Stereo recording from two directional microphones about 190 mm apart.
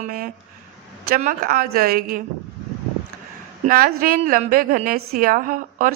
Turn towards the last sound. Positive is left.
turn(degrees=-45)  # may be behind; listen again after turning